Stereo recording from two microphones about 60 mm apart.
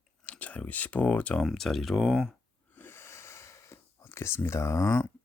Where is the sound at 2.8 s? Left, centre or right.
Left.